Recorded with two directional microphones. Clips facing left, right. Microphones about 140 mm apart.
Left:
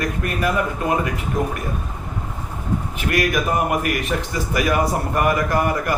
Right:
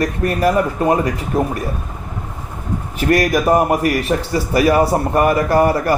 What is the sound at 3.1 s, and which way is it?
Speech, 40° right (ahead or behind).